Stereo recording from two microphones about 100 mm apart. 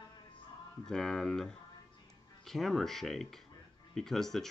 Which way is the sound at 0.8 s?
5° left (ahead or behind).